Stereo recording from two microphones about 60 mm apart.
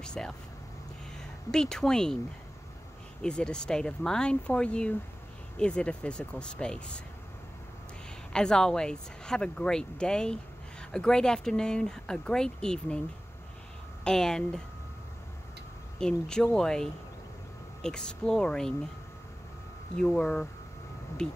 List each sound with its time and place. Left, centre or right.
0.0 s speech: centre
1.5 s speech: centre
3.2 s speech: centre
8.3 s speech: centre
14.0 s speech: centre
16.0 s speech: centre
20.0 s speech: centre